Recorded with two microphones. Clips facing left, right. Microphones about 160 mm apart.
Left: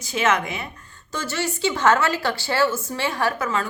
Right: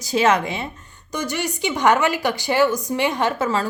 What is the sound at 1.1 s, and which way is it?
Speech, 15° right (ahead or behind).